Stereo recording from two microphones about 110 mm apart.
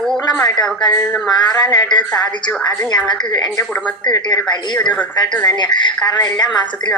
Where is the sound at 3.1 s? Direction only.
40° left (ahead or behind).